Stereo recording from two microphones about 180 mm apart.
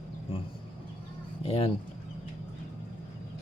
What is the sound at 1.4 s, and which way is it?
Speech, 30° left (ahead or behind).